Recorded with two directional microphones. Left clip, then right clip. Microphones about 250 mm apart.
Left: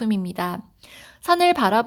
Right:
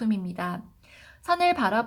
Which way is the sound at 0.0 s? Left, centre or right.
Left.